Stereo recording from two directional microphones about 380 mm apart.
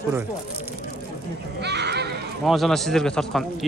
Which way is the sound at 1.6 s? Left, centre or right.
Right.